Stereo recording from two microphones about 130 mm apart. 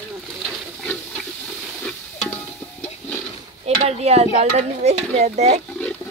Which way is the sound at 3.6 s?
55° right (ahead or behind).